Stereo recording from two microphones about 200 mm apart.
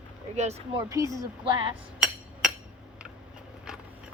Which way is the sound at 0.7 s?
15° right (ahead or behind).